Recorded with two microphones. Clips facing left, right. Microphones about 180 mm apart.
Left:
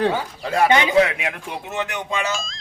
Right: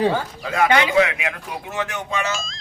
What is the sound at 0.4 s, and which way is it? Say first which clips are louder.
Speech: left 1 dB; 30° left (ahead or behind).